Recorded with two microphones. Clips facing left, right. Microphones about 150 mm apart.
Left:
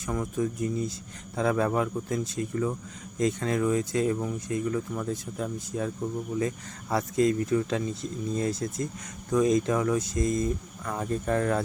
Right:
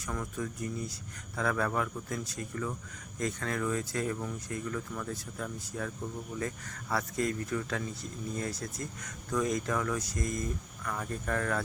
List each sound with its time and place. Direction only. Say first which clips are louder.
0.0 s speech: left 8 dB; 20° left (ahead or behind)
6.9 s speech: left 8 dB; 20° left (ahead or behind)